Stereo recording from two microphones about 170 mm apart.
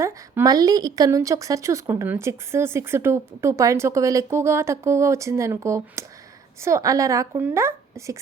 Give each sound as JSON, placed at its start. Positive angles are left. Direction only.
{"t": 0.0, "sound": "speech", "side_deg": -20}